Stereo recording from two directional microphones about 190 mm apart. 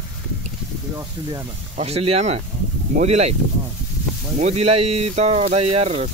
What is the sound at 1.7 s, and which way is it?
Speech, 30° right (ahead or behind).